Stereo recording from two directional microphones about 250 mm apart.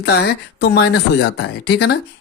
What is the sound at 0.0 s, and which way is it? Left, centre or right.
Speech, left.